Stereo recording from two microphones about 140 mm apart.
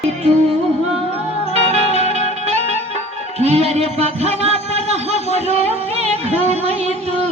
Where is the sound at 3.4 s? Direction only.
50° right (ahead or behind).